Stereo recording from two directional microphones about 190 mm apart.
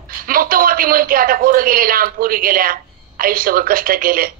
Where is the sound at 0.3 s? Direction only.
50° right (ahead or behind).